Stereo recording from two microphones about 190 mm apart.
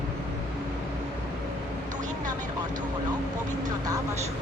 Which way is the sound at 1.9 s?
40° right (ahead or behind).